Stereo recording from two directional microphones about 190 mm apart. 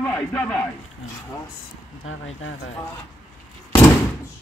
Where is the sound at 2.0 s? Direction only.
90° left.